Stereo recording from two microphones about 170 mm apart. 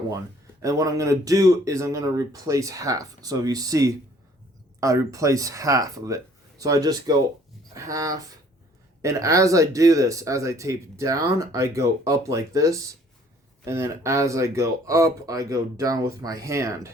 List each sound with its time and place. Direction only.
0.6 s speech: 20° right (ahead or behind)